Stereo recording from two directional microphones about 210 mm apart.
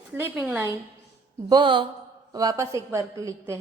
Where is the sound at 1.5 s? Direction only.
20° right (ahead or behind).